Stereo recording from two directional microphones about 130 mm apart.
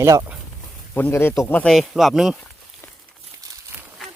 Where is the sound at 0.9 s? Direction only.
15° left (ahead or behind).